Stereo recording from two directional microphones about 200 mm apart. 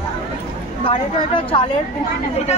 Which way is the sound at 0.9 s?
25° left (ahead or behind).